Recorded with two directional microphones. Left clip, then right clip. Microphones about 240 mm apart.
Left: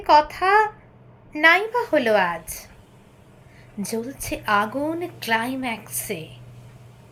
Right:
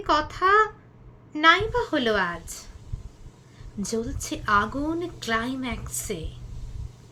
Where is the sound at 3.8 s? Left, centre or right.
Centre.